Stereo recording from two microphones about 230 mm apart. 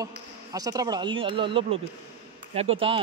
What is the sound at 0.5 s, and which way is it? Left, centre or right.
A man's voice, centre.